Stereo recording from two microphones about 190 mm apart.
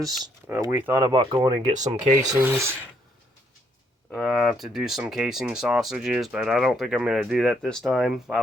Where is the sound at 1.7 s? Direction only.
40° right (ahead or behind).